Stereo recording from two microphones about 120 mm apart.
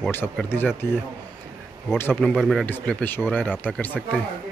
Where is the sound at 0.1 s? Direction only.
20° left (ahead or behind).